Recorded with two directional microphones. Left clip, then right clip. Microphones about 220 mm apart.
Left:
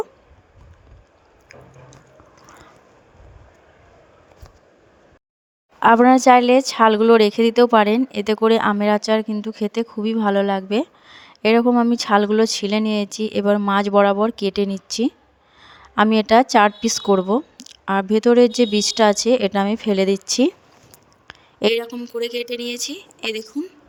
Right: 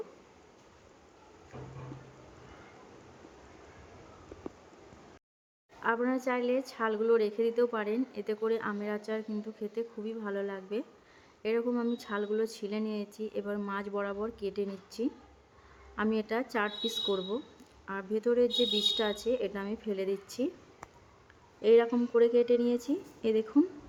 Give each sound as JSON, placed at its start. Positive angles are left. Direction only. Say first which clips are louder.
{"t": 5.8, "sound": "a woman's voice", "louder": "left 19 dB", "side_deg": 50}
{"t": 21.2, "sound": "a sound", "louder": "left 6 dB", "side_deg": 50}
{"t": 21.8, "sound": "speech", "louder": "even", "side_deg": 0}
{"t": 22.3, "sound": "a woman's voice", "louder": "left 1 dB", "side_deg": 50}